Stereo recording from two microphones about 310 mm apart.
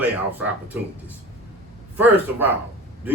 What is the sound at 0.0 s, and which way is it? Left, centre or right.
Speech, centre.